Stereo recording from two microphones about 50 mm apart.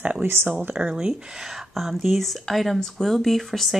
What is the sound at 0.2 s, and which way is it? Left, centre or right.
Speech, right.